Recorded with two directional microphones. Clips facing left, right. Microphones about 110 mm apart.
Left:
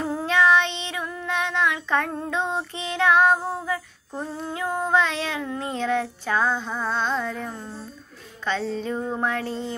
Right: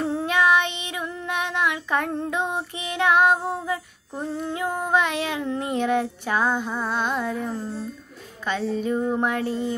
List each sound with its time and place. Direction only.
0.3 s child singing: 15° right (ahead or behind)
8.5 s child singing: 15° right (ahead or behind)